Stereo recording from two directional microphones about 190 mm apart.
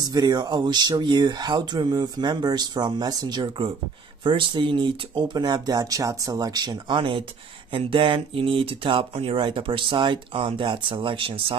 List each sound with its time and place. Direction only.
0.0 s speech: 20° right (ahead or behind)